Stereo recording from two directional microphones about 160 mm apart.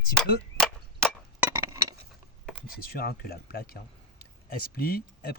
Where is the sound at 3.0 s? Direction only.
70° left (ahead or behind).